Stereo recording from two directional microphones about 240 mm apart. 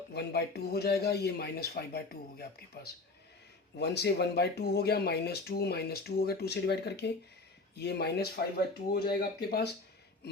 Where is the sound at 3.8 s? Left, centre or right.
Left.